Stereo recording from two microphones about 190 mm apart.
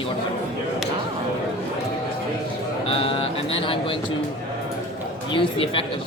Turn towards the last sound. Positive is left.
turn(degrees=30)  # may be behind; listen again after turning